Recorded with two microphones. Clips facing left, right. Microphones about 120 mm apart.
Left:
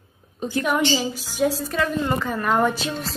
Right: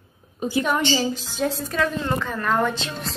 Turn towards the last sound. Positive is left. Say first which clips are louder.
# left 3 dB
turn(degrees=0)  # may be behind; listen again after turning